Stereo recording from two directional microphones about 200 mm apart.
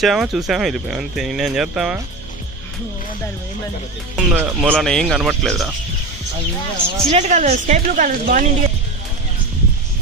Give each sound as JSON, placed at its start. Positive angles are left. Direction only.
{"t": 0.0, "sound": "speech", "side_deg": 0}
{"t": 4.2, "sound": "speech", "side_deg": -5}
{"t": 4.7, "sound": "speech", "side_deg": 0}
{"t": 7.1, "sound": "a woman's voice", "side_deg": -35}